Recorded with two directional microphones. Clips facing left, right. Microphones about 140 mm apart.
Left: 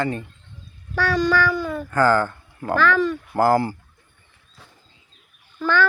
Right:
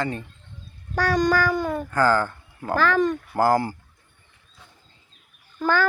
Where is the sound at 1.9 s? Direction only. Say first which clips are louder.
Left 3 dB; 15° right (ahead or behind).